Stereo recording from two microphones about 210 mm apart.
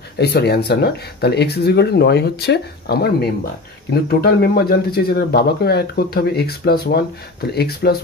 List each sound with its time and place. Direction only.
0.2 s speech: 50° left (ahead or behind)